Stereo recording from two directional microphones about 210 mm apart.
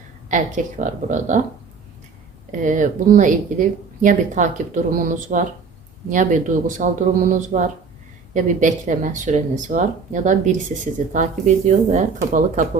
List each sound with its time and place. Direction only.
0.3 s speech: 35° right (ahead or behind)
2.5 s speech: 35° right (ahead or behind)